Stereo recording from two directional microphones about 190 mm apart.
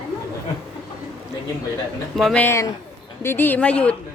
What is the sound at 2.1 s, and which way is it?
A woman's voice, 5° left (ahead or behind).